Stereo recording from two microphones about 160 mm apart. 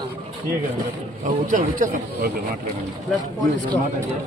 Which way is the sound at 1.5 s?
50° right (ahead or behind).